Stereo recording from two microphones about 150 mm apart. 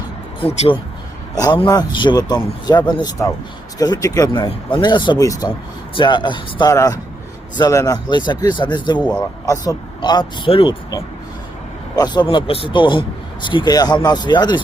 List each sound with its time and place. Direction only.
0.4 s a man's voice: 40° left (ahead or behind)
1.5 s a man's voice: 30° left (ahead or behind)
11.9 s a man's voice: 30° left (ahead or behind)